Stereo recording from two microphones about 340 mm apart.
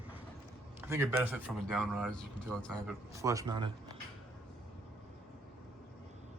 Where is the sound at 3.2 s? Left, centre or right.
Centre.